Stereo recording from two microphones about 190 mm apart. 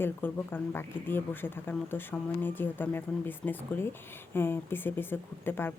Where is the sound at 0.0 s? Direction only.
10° left (ahead or behind).